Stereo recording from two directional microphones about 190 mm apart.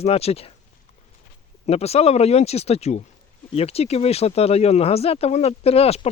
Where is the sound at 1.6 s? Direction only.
35° left (ahead or behind).